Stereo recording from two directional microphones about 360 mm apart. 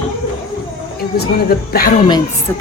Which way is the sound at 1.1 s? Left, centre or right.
Left.